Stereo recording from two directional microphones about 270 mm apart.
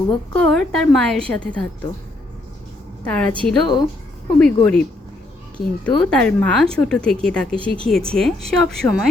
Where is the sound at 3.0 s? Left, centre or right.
Centre.